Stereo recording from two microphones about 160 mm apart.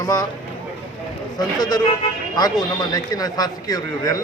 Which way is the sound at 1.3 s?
25° left (ahead or behind).